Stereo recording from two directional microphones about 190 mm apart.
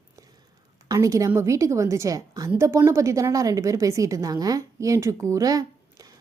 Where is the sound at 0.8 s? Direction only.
15° right (ahead or behind).